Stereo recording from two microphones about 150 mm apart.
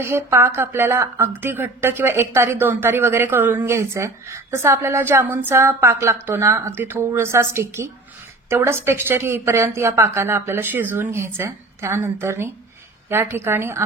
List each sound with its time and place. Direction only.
0.0 s speech: 15° right (ahead or behind)